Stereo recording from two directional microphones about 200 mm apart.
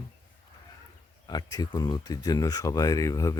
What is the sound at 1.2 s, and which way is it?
Speech, 20° left (ahead or behind).